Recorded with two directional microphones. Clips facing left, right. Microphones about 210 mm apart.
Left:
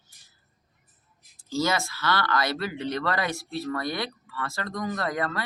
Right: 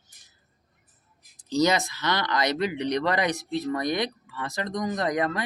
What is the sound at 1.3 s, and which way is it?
Speech, 20° right (ahead or behind).